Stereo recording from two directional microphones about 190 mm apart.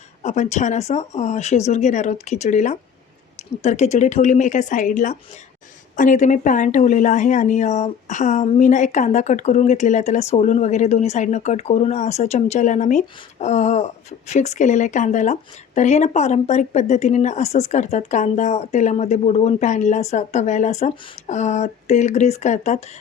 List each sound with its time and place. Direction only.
0.2 s a woman's voice: 40° left (ahead or behind)